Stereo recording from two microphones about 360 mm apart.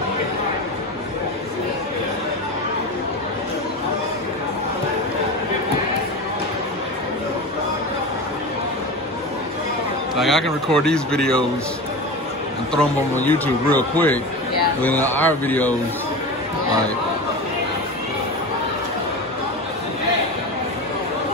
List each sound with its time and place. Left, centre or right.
10.1 s speech: centre
12.7 s speech: centre